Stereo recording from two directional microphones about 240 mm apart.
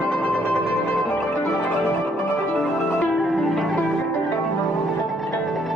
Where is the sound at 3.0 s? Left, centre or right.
Centre.